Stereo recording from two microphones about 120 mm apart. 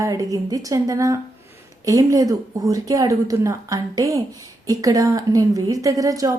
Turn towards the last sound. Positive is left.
turn(degrees=-30)  # may be behind; listen again after turning